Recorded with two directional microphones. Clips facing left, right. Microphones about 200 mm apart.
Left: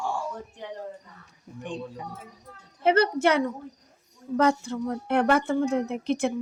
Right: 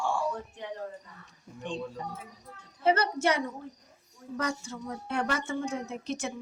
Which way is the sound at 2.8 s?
60° left (ahead or behind).